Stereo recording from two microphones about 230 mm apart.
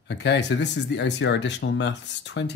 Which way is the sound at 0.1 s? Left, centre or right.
Left.